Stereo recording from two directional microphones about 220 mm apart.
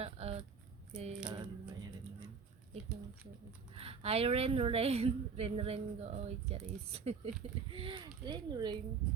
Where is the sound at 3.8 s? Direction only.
25° right (ahead or behind).